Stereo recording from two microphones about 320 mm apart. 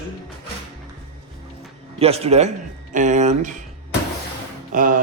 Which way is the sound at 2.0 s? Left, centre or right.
Centre.